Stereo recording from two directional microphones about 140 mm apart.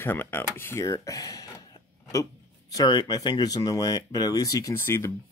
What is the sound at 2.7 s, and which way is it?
Speech, 30° left (ahead or behind).